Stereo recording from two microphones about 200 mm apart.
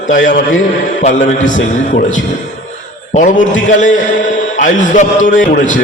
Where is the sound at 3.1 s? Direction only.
40° left (ahead or behind).